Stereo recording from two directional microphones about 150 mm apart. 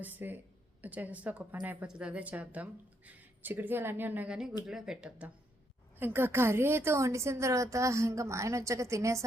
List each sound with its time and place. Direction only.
0.0 s a woman's voice: 10° right (ahead or behind)